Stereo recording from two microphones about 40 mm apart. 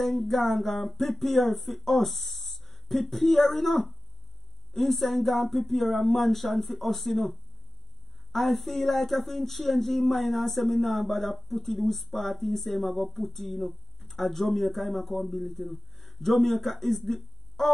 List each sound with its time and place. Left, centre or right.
0.0 s speech: centre